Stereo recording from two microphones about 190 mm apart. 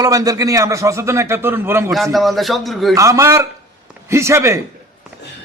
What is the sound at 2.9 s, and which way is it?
A man's voice, 15° right (ahead or behind).